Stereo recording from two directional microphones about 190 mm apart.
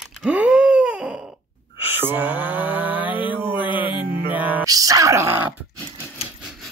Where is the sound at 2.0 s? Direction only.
10° right (ahead or behind).